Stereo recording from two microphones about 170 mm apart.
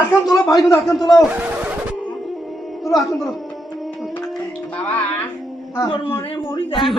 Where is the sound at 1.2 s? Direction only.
10° right (ahead or behind).